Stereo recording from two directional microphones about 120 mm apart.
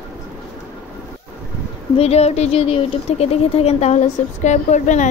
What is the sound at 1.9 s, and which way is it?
Speech, 60° left (ahead or behind).